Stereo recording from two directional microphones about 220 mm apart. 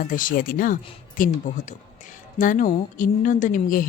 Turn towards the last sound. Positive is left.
turn(degrees=40)  # may be behind; listen again after turning